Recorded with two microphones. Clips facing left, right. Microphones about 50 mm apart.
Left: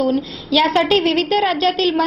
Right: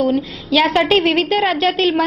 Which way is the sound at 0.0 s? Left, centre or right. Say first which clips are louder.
Right 1 dB; centre.